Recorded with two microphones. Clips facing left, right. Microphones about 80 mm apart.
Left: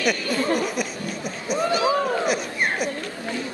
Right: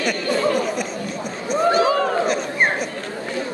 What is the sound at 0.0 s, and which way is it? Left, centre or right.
Speech, right.